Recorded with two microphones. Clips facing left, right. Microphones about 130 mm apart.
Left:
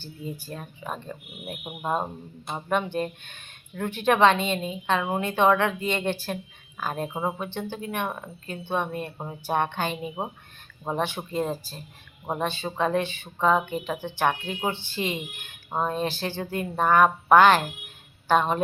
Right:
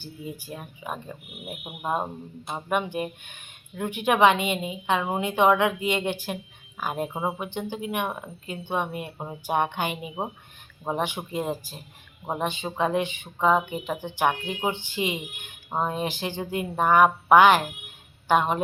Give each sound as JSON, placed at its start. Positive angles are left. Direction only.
{"t": 0.0, "sound": "speech", "side_deg": -15}
{"t": 7.3, "sound": "speech", "side_deg": -15}